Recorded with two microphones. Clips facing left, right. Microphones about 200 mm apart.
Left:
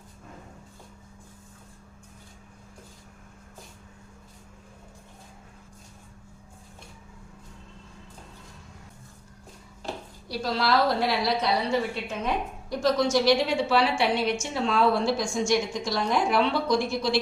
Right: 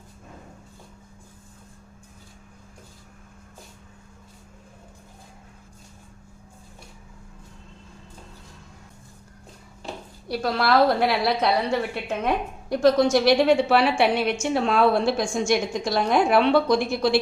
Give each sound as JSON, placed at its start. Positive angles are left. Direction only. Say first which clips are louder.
{"t": 10.2, "sound": "a woman's voice", "louder": "right 3 dB", "side_deg": -60}